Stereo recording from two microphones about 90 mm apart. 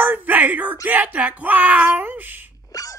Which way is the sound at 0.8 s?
15° right (ahead or behind).